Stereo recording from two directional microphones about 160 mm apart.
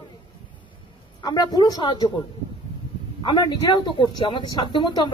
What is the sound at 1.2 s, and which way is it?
Speech, 25° left (ahead or behind).